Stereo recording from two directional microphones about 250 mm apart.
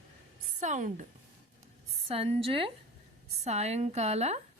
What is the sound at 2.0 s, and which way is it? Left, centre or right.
A woman's voice, right.